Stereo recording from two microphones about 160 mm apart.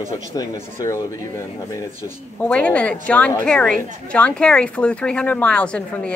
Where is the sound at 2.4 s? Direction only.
5° left (ahead or behind).